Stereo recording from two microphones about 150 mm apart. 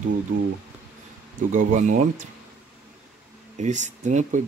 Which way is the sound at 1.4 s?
55° right (ahead or behind).